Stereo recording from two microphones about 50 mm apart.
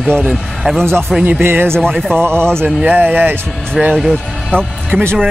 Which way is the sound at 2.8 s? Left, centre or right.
Right.